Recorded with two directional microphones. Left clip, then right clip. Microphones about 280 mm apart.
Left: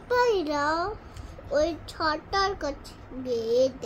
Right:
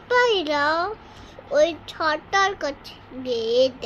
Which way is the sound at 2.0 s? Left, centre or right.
Centre.